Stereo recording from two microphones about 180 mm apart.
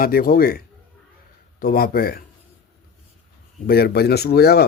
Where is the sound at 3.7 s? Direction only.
60° left (ahead or behind).